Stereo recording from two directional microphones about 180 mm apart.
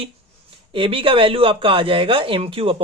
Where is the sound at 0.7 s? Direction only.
30° right (ahead or behind).